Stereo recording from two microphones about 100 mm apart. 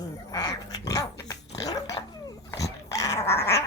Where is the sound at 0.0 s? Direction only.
40° left (ahead or behind).